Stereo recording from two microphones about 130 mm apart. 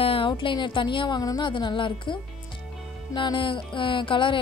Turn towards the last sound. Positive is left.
turn(degrees=40)  # may be behind; listen again after turning